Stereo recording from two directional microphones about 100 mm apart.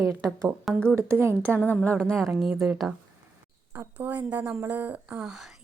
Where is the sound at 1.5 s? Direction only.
10° left (ahead or behind); by 2.9 s 5° right (ahead or behind).